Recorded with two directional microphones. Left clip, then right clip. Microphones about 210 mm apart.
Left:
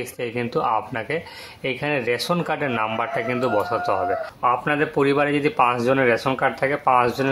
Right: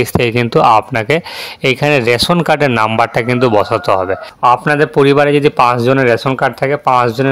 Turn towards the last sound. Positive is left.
turn(degrees=-35)  # may be behind; listen again after turning